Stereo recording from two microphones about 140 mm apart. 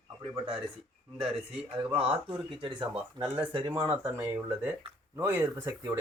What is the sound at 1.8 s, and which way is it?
Speech, 40° right (ahead or behind).